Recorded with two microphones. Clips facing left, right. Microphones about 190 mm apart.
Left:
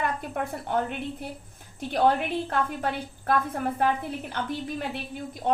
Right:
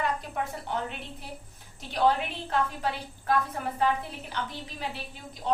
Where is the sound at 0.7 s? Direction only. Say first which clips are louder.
Left 7 dB; 55° left (ahead or behind).